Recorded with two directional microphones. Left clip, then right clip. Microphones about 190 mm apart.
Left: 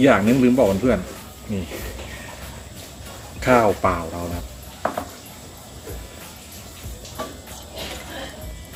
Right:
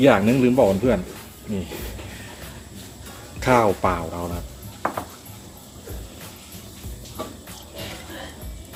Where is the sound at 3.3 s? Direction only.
25° right (ahead or behind).